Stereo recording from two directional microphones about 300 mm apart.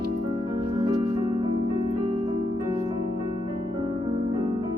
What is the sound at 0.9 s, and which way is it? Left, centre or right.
Music, centre.